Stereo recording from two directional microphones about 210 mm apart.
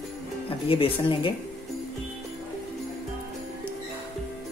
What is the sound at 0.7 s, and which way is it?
Speech, 25° left (ahead or behind).